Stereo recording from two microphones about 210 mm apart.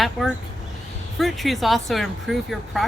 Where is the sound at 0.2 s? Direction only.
Centre (ahead or behind).